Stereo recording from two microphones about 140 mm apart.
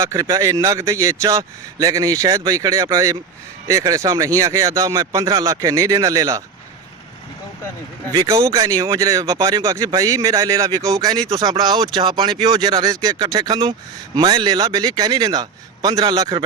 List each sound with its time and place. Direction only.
0.0 s speech: 20° right (ahead or behind)
8.1 s speech: 25° right (ahead or behind)